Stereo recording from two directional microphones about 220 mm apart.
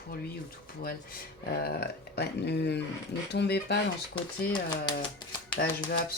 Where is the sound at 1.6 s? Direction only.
45° left (ahead or behind).